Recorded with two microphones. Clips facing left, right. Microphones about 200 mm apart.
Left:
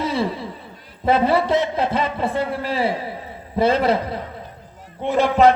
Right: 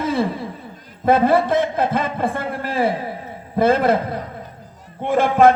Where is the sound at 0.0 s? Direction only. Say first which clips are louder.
Right 2 dB; 50° right (ahead or behind).